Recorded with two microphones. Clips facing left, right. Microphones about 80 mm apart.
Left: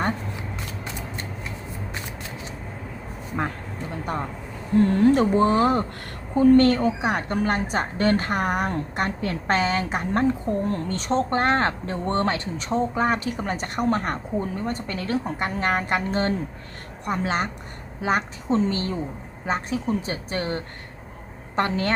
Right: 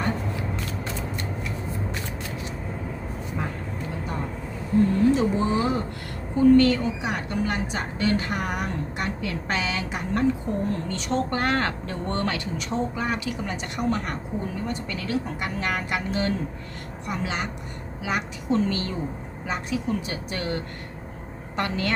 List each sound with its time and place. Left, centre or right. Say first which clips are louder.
4.9 s a woman's voice: left 3 dB; left